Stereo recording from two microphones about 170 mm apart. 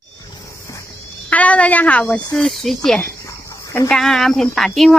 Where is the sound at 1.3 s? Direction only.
10° left (ahead or behind).